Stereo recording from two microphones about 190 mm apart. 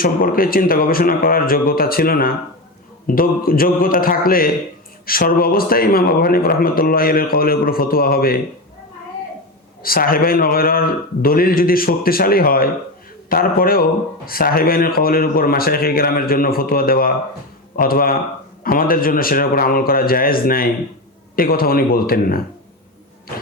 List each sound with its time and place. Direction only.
0.0 s speech: 50° left (ahead or behind)
9.8 s speech: 50° left (ahead or behind)